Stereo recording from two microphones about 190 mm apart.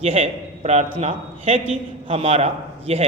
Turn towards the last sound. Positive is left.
turn(degrees=-35)  # may be behind; listen again after turning